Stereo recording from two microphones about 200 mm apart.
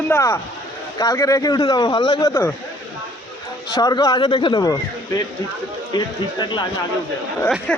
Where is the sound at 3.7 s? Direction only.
20° left (ahead or behind).